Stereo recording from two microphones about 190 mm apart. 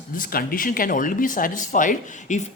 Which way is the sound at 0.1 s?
50° left (ahead or behind).